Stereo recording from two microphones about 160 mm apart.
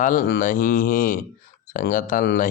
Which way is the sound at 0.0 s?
55° left (ahead or behind).